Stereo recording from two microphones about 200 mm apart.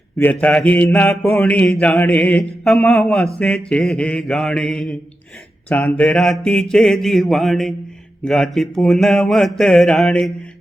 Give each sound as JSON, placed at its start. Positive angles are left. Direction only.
{"t": 0.2, "sound": "speech", "side_deg": 10}
{"t": 2.8, "sound": "mantra", "side_deg": 5}